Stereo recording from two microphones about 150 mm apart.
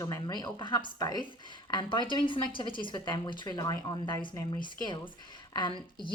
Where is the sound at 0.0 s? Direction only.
25° left (ahead or behind).